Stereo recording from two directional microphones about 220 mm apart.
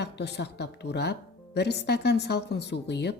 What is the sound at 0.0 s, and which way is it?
A woman's voice, 50° left (ahead or behind).